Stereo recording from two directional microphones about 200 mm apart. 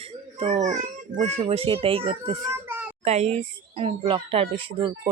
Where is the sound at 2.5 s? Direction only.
10° right (ahead or behind).